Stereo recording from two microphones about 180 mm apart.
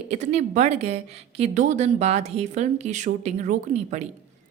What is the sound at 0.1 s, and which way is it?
A woman's voice, 40° right (ahead or behind).